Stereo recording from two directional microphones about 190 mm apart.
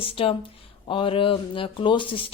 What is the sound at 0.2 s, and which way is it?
Speech, 30° left (ahead or behind).